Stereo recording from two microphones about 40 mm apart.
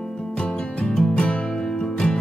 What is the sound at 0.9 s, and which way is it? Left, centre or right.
Music, centre.